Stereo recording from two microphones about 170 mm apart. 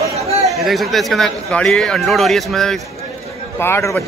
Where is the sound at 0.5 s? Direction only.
Centre (ahead or behind).